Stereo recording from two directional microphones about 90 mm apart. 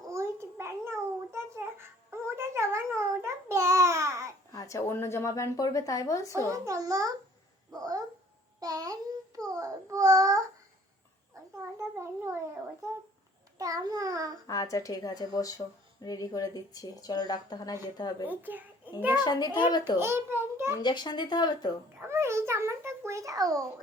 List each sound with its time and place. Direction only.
0.1 s a sound: 30° right (ahead or behind)
2.0 s babbling: 30° right (ahead or behind)
4.5 s speech: 35° left (ahead or behind)
6.5 s a child's voice: 40° right (ahead or behind)
8.6 s a sound: 45° right (ahead or behind)
9.4 s child singing: 40° right (ahead or behind)
11.5 s a sound: 30° right (ahead or behind)
13.6 s child singing: 40° right (ahead or behind)
14.4 s speech: 40° left (ahead or behind)
18.3 s a child's voice: 20° right (ahead or behind)
19.1 s speech: 50° left (ahead or behind)
20.0 s a child's voice: 25° right (ahead or behind)
20.8 s speech: 55° left (ahead or behind)
21.9 s a sound: 30° right (ahead or behind)